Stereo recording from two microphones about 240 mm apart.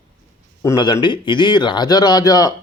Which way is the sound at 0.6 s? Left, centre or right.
Centre.